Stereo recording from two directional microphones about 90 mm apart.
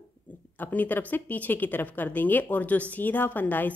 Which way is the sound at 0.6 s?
20° left (ahead or behind).